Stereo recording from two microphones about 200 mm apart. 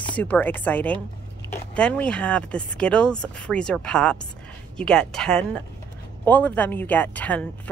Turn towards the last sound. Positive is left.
turn(degrees=5)  # may be behind; listen again after turning